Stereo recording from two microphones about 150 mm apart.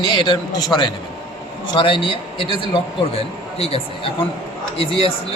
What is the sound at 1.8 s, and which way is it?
Speech, 35° left (ahead or behind).